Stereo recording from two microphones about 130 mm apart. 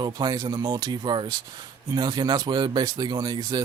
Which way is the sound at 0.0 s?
35° right (ahead or behind).